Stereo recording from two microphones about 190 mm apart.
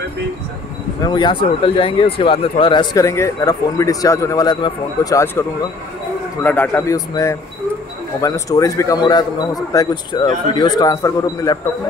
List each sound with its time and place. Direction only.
1.0 s a man's voice: 25° left (ahead or behind)